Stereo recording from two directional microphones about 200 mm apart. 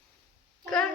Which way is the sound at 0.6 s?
5° left (ahead or behind).